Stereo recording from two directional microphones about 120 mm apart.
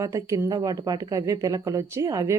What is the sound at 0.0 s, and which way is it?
Speech, 25° right (ahead or behind).